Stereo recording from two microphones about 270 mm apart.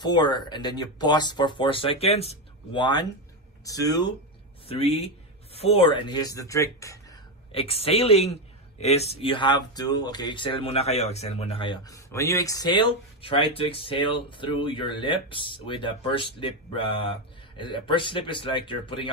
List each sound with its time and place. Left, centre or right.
0.0 s speech: centre